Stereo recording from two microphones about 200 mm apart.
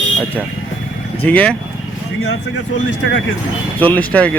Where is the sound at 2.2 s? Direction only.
60° left (ahead or behind).